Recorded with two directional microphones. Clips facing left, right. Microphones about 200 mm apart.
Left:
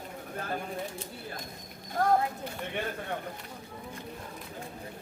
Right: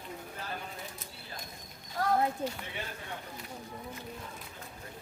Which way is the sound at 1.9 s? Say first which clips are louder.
Left 3 dB; 50° left (ahead or behind).